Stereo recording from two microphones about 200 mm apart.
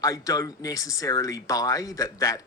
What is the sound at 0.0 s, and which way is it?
Speech, 15° left (ahead or behind).